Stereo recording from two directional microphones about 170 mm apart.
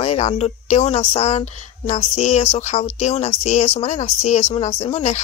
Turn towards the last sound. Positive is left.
turn(degrees=40)  # may be behind; listen again after turning